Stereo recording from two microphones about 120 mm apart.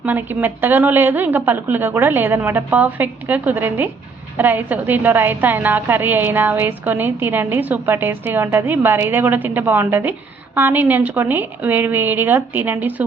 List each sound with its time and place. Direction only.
0.0 s a woman's voice: 15° right (ahead or behind)